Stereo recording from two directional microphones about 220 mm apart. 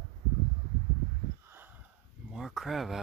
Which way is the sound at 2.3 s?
Centre (ahead or behind).